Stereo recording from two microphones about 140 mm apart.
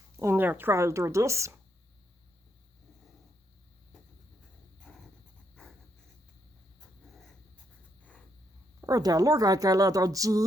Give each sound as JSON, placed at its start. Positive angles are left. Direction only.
{"t": 0.2, "sound": "speech", "side_deg": -15}
{"t": 4.9, "sound": "dog", "side_deg": 0}
{"t": 8.8, "sound": "speech", "side_deg": -25}